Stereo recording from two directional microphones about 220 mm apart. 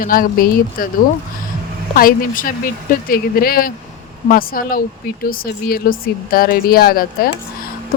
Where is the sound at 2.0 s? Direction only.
40° left (ahead or behind).